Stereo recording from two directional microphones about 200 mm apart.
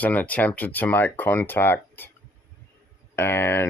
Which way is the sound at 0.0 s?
10° left (ahead or behind).